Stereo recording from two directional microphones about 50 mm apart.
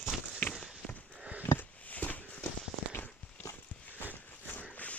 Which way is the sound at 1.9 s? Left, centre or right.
Left.